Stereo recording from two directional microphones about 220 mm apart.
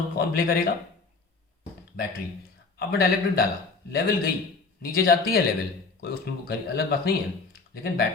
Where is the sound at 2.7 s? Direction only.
45° left (ahead or behind).